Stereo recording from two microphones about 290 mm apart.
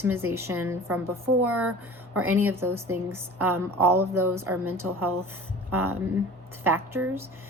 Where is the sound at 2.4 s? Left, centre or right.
Centre.